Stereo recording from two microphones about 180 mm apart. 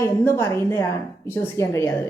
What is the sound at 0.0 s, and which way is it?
A woman's voice, 15° left (ahead or behind).